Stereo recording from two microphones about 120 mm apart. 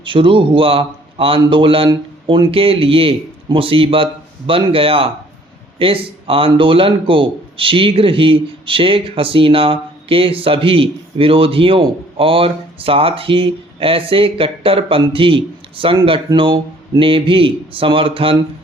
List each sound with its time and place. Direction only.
0.0 s a man's voice: 45° right (ahead or behind)